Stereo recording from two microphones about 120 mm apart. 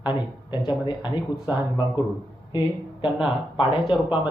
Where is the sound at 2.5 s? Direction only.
35° left (ahead or behind).